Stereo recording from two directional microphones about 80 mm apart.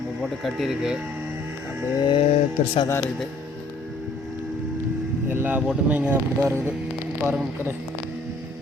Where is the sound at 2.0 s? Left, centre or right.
Left.